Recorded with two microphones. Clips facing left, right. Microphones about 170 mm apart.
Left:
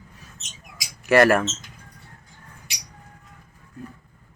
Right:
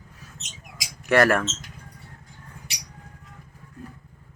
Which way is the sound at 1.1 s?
5° left (ahead or behind).